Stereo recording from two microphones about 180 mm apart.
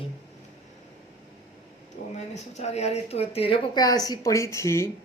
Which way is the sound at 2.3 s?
40° left (ahead or behind).